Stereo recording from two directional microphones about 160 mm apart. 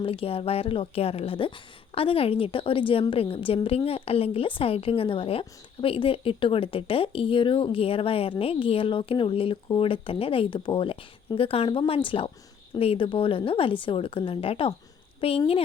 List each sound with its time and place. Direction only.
0.0 s a woman's voice: 35° left (ahead or behind)